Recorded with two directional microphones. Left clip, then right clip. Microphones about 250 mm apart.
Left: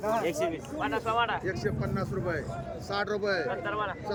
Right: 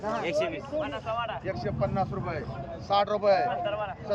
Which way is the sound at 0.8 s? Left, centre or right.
Left.